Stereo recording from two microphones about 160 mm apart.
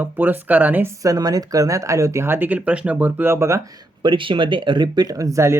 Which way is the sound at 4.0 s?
30° right (ahead or behind).